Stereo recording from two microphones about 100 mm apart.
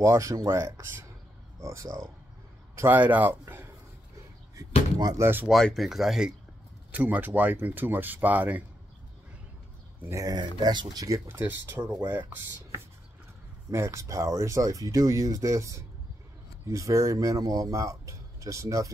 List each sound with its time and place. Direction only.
0.0 s speech: 30° right (ahead or behind)
5.1 s speech: 25° right (ahead or behind)
5.5 s speech: 5° left (ahead or behind)
6.9 s speech: 15° right (ahead or behind)
10.0 s speech: 35° right (ahead or behind)
11.1 s speech: 20° right (ahead or behind)
13.7 s speech: 30° right (ahead or behind)